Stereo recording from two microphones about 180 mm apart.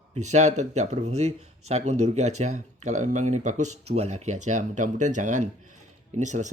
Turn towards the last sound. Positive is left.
turn(degrees=-40)  # may be behind; listen again after turning